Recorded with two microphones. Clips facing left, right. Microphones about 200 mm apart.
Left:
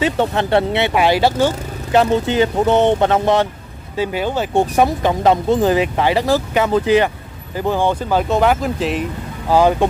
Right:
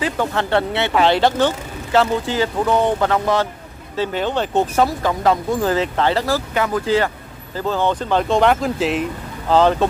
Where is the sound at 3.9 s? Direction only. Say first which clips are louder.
Left 1 dB; 10° left (ahead or behind).